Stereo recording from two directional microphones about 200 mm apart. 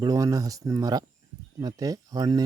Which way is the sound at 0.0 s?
15° right (ahead or behind).